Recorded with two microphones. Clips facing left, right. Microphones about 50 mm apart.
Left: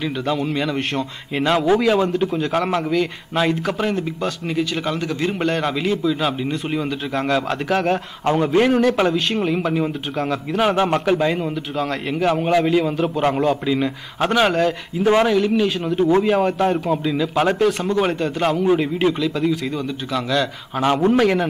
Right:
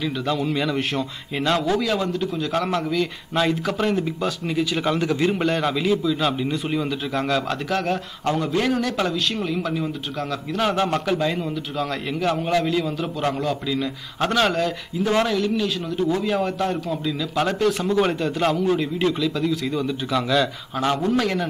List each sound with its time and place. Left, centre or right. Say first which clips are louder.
0.0 s a man's voice: left 2 dB; centre
1.4 s a man's voice: left 5 dB; left
2.5 s a man's voice: left 3 dB; centre
7.9 s a man's voice: left 4 dB; left
14.2 s a man's voice: left 3 dB; centre
17.6 s speech: left 1 dB; centre
18.6 s a man's voice: left 4 dB; left; by 20.4 s centre
21.0 s a man's voice: left 5 dB; left